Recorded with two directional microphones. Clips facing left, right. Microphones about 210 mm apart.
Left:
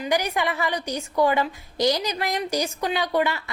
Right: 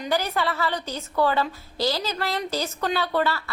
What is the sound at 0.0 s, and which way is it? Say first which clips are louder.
A woman's voice: left 1 dB; 15° left (ahead or behind).